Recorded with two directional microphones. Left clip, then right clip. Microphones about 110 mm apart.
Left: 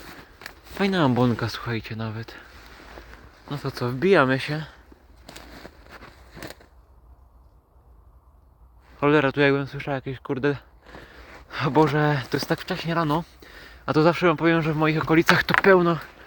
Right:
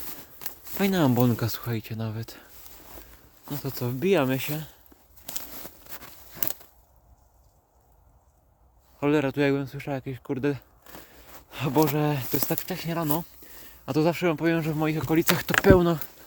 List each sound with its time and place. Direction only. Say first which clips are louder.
0.8 s speech: left 2 dB; 70° right (ahead or behind); by 2.5 s 90° right
3.1 s a sound: left 9 dB; 30° left (ahead or behind)
3.5 s speech: left 4 dB; 45° right (ahead or behind)
5.3 s walk: right 1 dB; 5° right (ahead or behind)
9.0 s speech: left 5 dB; 30° right (ahead or behind); by 10.7 s 50° right (ahead or behind)
11.0 s a sound: left 5 dB; 45° right (ahead or behind)
12.5 s speech: left 5 dB; 35° right (ahead or behind)
14.8 s speech: left 5 dB; 15° right (ahead or behind)
15.6 s speech: even; 90° right